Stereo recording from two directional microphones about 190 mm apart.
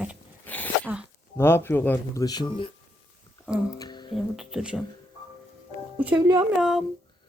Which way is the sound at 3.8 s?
25° left (ahead or behind).